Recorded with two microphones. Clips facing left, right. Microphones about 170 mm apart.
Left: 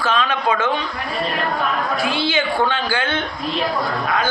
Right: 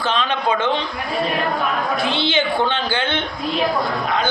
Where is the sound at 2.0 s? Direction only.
25° right (ahead or behind).